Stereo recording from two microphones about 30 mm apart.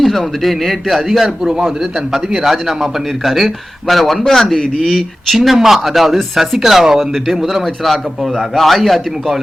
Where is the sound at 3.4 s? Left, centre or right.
Centre.